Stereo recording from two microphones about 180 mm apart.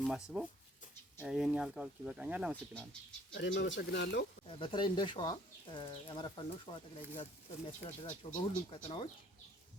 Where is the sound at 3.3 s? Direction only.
75° left (ahead or behind).